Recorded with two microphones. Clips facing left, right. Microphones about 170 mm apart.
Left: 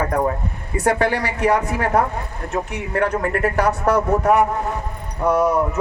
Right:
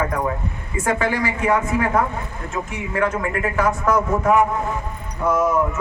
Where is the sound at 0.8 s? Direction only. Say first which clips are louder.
Left 2 dB; 70° left (ahead or behind).